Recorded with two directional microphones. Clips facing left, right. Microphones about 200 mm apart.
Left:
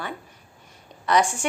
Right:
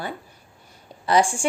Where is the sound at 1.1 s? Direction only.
30° right (ahead or behind).